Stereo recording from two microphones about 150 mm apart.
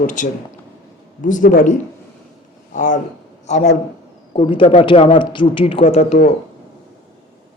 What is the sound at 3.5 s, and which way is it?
Speech, 45° left (ahead or behind).